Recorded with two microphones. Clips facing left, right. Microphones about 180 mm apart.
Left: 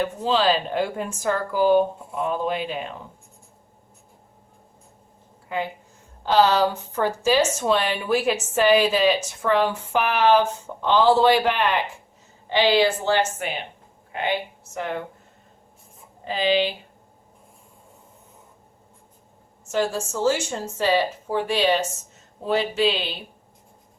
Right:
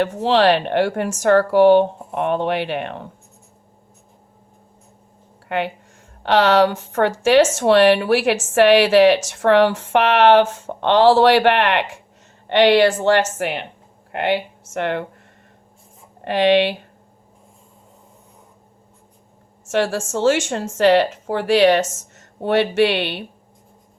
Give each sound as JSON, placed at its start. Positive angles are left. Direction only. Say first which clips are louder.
{"t": 0.0, "sound": "speech", "louder": "right 6 dB", "side_deg": -70}
{"t": 5.5, "sound": "speech", "louder": "right 5 dB", "side_deg": -75}
{"t": 16.2, "sound": "speech", "louder": "right 6 dB", "side_deg": -75}
{"t": 19.7, "sound": "speech", "louder": "right 4 dB", "side_deg": -85}